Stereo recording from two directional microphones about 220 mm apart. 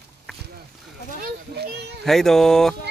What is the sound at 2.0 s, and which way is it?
Speech, centre (ahead or behind).